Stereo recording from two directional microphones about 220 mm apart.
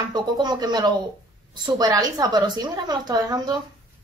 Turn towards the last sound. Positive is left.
turn(degrees=-20)  # may be behind; listen again after turning